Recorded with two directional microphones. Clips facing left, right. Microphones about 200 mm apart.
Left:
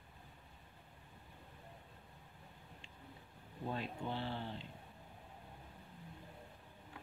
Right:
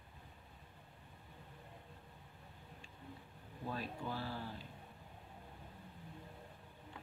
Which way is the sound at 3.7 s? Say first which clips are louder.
Left 1 dB; 25° left (ahead or behind).